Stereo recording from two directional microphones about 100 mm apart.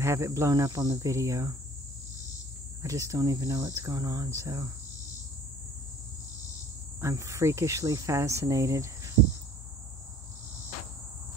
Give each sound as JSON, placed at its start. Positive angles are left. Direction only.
{"t": 0.0, "sound": "speech", "side_deg": -30}
{"t": 2.8, "sound": "speech", "side_deg": -35}
{"t": 7.0, "sound": "speech", "side_deg": -30}